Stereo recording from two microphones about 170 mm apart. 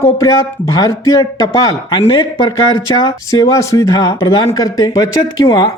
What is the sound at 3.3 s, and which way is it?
Speech, 20° left (ahead or behind).